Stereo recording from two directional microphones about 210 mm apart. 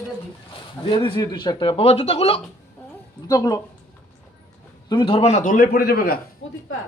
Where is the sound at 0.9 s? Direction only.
25° left (ahead or behind).